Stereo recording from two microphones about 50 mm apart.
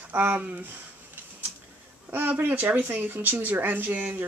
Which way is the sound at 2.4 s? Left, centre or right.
Right.